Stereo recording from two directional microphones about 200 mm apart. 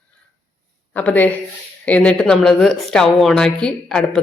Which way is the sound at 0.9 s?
10° left (ahead or behind).